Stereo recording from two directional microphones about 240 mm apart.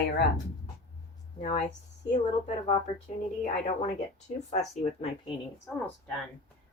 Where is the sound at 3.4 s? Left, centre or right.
Left.